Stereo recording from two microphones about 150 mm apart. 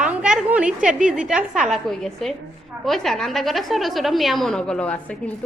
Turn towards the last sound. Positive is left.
turn(degrees=5)  # may be behind; listen again after turning